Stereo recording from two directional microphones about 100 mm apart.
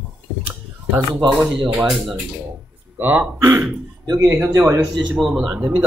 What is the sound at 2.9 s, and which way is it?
Speech, 20° right (ahead or behind).